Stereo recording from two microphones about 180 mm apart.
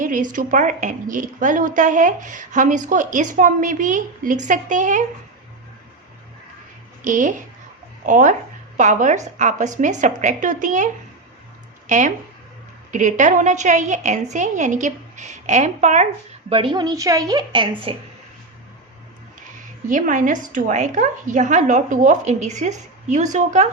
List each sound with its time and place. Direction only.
0.0 s a woman's voice: 45° right (ahead or behind)
7.0 s a woman's voice: 45° right (ahead or behind)
11.9 s a woman's voice: 45° right (ahead or behind)
16.5 s a woman's voice: 30° right (ahead or behind)
19.9 s a woman's voice: 45° right (ahead or behind)